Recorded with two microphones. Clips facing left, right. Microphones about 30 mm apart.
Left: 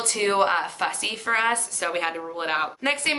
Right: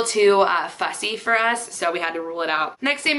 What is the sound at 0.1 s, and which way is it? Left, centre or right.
A woman's voice, centre.